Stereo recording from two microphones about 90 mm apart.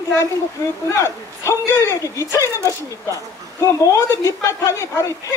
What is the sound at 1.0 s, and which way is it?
Speech, 30° left (ahead or behind).